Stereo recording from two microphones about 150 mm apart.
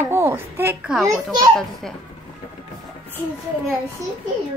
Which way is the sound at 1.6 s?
5° left (ahead or behind).